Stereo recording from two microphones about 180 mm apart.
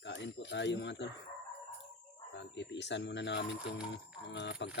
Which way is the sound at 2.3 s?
75° left (ahead or behind).